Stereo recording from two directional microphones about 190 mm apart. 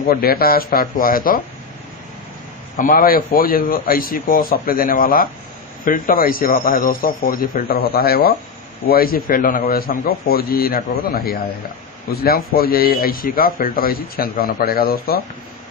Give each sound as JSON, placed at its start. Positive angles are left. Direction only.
{"t": 0.0, "sound": "a man's voice", "side_deg": 50}
{"t": 2.7, "sound": "a man's voice", "side_deg": 45}